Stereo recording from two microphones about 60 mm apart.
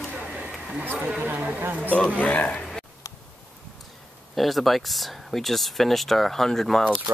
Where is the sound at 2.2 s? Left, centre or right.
Left.